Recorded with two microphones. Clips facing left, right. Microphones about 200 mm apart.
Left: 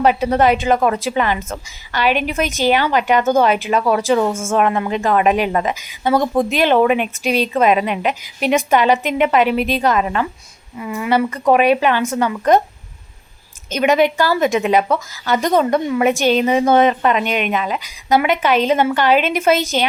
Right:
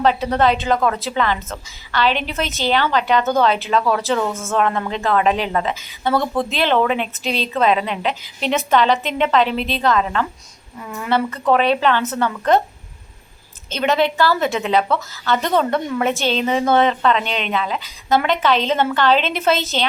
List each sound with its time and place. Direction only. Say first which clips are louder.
0.0 s a woman's voice: left 2 dB; 15° left (ahead or behind)
13.7 s a woman's voice: left 4 dB; 15° left (ahead or behind)